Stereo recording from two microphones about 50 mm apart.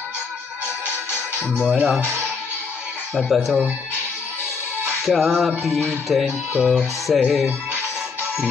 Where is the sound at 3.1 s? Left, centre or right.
Centre.